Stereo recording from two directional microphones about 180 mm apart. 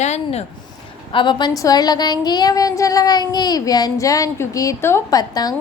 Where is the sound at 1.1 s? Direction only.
25° left (ahead or behind).